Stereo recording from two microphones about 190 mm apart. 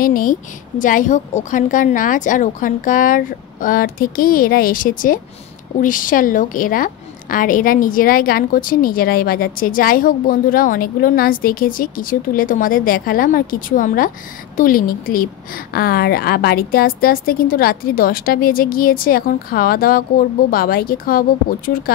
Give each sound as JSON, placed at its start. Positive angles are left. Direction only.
{"t": 0.0, "sound": "a woman's voice", "side_deg": 45}